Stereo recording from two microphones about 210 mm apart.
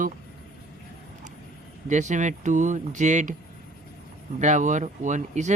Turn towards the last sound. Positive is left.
turn(degrees=-35)  # may be behind; listen again after turning